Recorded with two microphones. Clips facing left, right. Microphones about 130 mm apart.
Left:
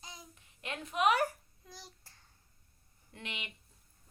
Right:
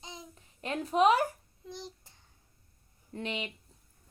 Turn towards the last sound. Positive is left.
turn(degrees=-35)  # may be behind; listen again after turning